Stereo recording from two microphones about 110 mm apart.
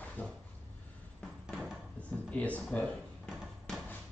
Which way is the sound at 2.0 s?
10° left (ahead or behind).